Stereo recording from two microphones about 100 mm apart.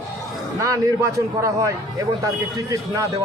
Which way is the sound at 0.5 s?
35° right (ahead or behind).